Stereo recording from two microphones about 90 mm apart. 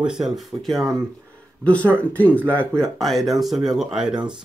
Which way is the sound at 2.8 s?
Centre (ahead or behind).